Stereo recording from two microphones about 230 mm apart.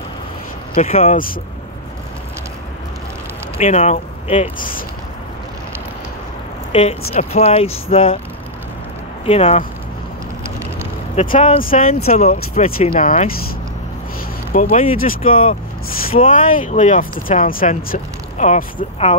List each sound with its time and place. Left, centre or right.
0.7 s speech: left
3.5 s speech: left
6.7 s speech: left
9.2 s speech: left
11.1 s speech: left
14.5 s speech: left